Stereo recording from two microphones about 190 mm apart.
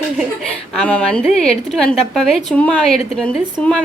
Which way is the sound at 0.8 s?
5° left (ahead or behind).